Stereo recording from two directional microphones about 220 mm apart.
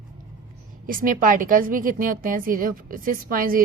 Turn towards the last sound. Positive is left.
turn(degrees=-40)  # may be behind; listen again after turning